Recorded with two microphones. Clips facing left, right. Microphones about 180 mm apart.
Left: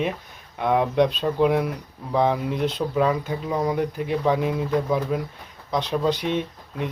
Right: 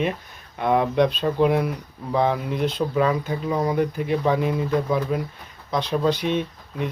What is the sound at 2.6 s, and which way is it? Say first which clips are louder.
Speech: right 1 dB; 15° right (ahead or behind).